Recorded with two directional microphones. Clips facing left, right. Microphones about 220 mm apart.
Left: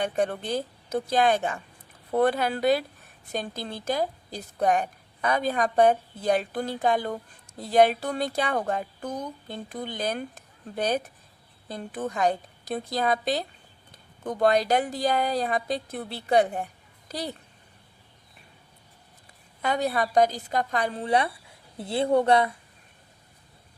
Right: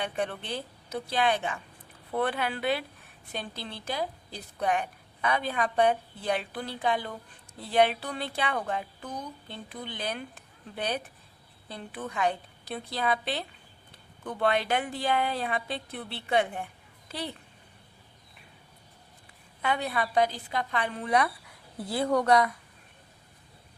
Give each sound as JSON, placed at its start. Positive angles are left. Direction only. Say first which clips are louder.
{"t": 0.0, "sound": "a woman's voice", "louder": "left 6 dB", "side_deg": 45}
{"t": 19.6, "sound": "a woman's voice", "louder": "left 4 dB", "side_deg": 40}